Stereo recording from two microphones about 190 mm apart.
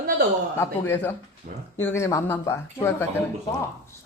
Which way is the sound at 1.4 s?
45° right (ahead or behind).